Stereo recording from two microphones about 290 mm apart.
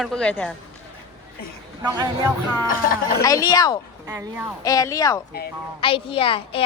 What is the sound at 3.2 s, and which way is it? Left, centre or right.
Speech, centre.